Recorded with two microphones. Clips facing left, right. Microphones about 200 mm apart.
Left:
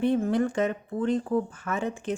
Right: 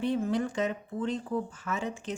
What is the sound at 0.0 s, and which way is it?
A woman's voice, 55° left (ahead or behind).